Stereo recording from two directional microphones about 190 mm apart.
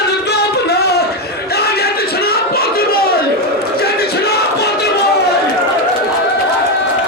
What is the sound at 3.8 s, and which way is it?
Music, 55° left (ahead or behind).